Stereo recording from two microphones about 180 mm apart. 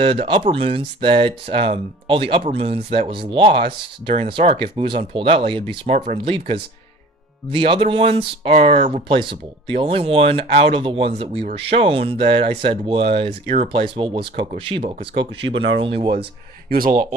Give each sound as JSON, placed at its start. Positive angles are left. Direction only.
{"t": 0.0, "sound": "speech", "side_deg": -30}
{"t": 16.6, "sound": "speech", "side_deg": -55}